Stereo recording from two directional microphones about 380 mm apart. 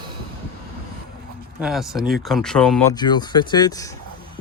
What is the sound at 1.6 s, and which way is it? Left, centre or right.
Speech, centre.